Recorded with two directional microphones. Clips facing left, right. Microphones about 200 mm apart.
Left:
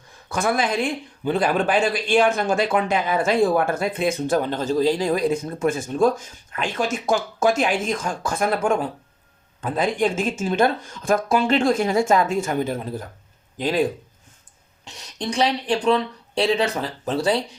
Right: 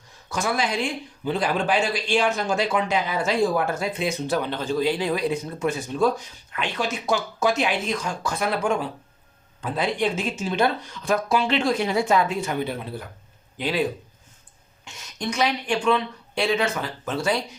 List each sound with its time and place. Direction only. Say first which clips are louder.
0.3 s speech: left 3 dB; 55° left (ahead or behind)
14.8 s speech: left 1 dB; 35° left (ahead or behind)